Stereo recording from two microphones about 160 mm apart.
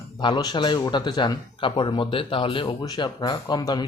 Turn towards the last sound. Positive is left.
turn(degrees=25)  # may be behind; listen again after turning